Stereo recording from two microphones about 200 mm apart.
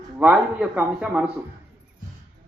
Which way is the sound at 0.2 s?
5° right (ahead or behind).